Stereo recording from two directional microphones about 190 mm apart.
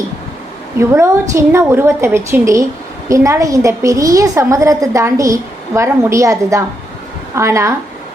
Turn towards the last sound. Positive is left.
turn(degrees=-15)  # may be behind; listen again after turning